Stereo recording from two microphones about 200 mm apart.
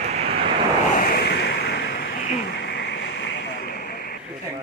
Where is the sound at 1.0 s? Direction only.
50° left (ahead or behind).